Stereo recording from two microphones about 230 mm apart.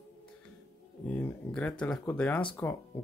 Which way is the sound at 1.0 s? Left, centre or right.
Centre.